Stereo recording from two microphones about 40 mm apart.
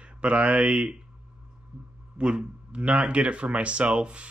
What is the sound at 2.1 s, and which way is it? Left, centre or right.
Speech, right.